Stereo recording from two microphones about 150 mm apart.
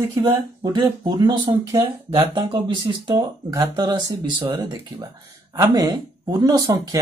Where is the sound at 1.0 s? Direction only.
30° right (ahead or behind).